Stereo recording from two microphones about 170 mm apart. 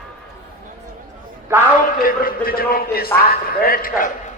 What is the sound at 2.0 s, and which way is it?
A man's voice, 55° left (ahead or behind).